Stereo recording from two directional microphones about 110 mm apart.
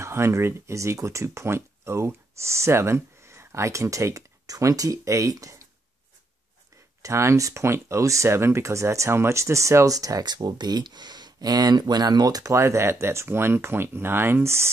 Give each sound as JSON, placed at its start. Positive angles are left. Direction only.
{"t": 0.0, "sound": "speech", "side_deg": -25}
{"t": 7.0, "sound": "speech", "side_deg": -25}